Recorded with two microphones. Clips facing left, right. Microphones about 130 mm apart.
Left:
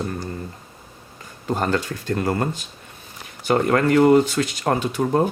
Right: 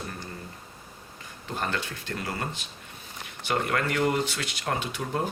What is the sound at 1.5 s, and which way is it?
Speech, 40° left (ahead or behind).